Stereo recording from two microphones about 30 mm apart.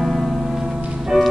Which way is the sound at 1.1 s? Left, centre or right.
Centre.